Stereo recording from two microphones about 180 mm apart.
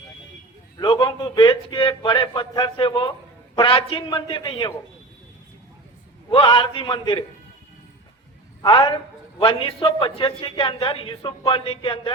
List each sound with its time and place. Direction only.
0.8 s a sound: 25° left (ahead or behind)
3.5 s a man's voice: 30° left (ahead or behind)
6.3 s a man's voice: 30° left (ahead or behind)
8.6 s a man's voice: 30° left (ahead or behind)